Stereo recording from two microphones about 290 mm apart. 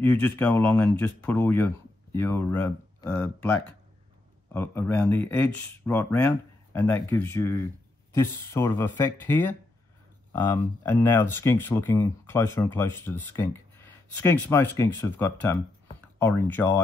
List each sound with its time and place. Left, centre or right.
0.0 s speech: centre